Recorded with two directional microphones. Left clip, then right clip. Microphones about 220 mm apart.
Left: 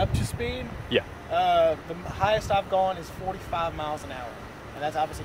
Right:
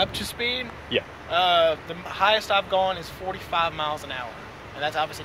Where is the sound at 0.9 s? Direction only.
15° left (ahead or behind).